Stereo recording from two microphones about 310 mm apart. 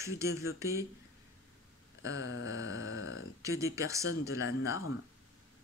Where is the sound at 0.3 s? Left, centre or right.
Left.